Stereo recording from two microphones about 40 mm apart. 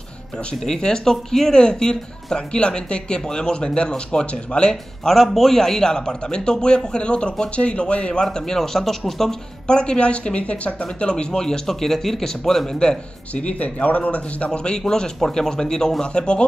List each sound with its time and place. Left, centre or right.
0.5 s a man's voice: centre
5.0 s a man's voice: centre
9.7 s speech: left
13.3 s speech: left
14.8 s a man's voice: centre